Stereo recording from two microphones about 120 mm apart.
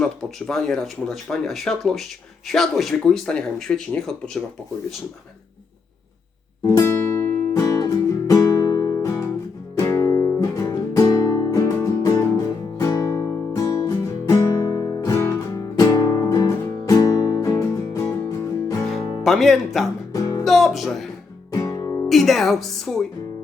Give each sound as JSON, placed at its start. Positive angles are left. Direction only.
{"t": 0.0, "sound": "speech", "side_deg": 5}
{"t": 6.7, "sound": "music", "side_deg": 25}
{"t": 18.9, "sound": "music", "side_deg": 0}
{"t": 20.1, "sound": "music", "side_deg": 30}
{"t": 20.4, "sound": "music", "side_deg": 0}
{"t": 21.5, "sound": "music", "side_deg": 30}
{"t": 22.1, "sound": "speech", "side_deg": 0}